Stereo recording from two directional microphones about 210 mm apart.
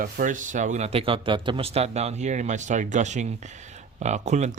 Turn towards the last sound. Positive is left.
turn(degrees=-35)  # may be behind; listen again after turning